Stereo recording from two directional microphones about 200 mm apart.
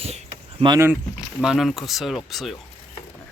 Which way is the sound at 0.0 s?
30° right (ahead or behind).